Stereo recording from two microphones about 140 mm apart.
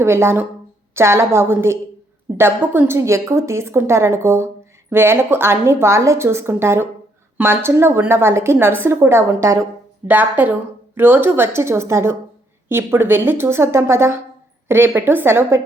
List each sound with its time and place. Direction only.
0.0 s a woman's voice: 15° right (ahead or behind)